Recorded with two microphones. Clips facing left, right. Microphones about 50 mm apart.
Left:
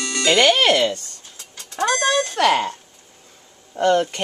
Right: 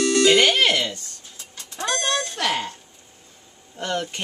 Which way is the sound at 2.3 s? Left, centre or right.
Left.